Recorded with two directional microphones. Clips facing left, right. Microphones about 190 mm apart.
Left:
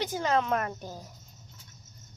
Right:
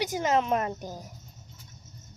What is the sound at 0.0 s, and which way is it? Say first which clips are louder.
A woman's voice: right 2 dB; 15° right (ahead or behind).